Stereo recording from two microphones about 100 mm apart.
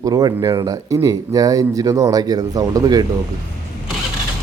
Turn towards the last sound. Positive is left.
turn(degrees=-40)  # may be behind; listen again after turning